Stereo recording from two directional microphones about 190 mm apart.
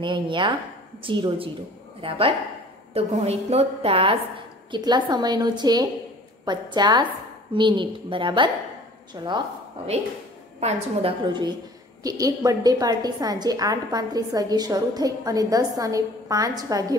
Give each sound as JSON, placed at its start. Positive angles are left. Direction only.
{"t": 0.0, "sound": "a woman's voice", "side_deg": -25}